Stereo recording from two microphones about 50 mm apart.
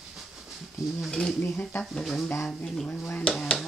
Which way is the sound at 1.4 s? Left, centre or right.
Left.